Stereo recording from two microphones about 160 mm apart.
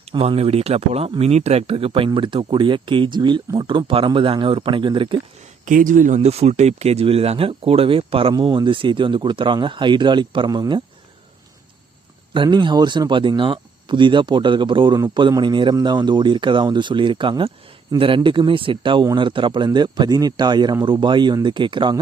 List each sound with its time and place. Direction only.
0.1 s speech: 35° right (ahead or behind)
5.6 s speech: 55° right (ahead or behind); by 10.8 s 25° right (ahead or behind)
12.3 s speech: 30° right (ahead or behind)